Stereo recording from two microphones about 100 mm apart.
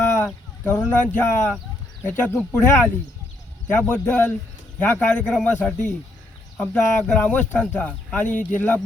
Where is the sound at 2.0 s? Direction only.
20° left (ahead or behind).